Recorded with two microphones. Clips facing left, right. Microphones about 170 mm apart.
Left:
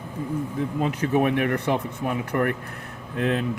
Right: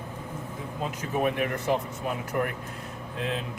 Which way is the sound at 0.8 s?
65° left (ahead or behind).